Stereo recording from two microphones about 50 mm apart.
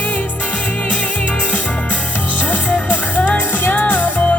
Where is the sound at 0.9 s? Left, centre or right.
Left.